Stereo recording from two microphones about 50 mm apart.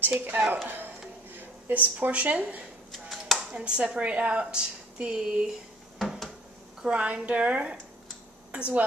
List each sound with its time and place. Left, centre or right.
0.0 s speech: right
1.7 s a woman's voice: right
2.9 s a sound: centre
3.5 s a woman's voice: centre
5.9 s drawer open or close: centre
6.9 s a woman's voice: right